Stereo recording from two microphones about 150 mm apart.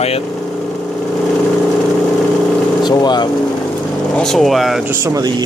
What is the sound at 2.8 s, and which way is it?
Speech, 30° left (ahead or behind).